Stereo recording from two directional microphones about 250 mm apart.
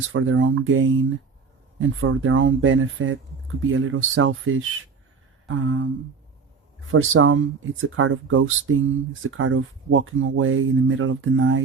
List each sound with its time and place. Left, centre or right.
0.1 s speech: right
6.9 s speech: right